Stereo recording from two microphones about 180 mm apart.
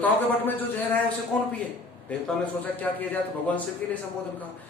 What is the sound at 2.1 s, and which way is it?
A man's voice, 5° left (ahead or behind).